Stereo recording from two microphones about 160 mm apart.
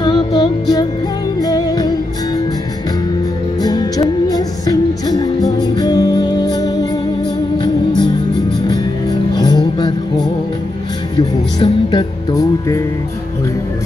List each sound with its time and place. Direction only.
0.0 s music: 25° left (ahead or behind)
3.6 s music: 25° left (ahead or behind)